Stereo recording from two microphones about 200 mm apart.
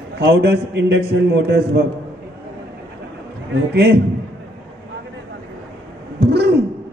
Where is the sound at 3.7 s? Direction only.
55° right (ahead or behind).